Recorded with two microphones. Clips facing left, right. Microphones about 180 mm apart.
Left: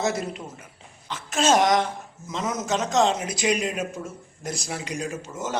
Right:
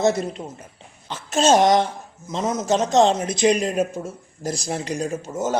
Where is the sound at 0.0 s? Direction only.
30° right (ahead or behind).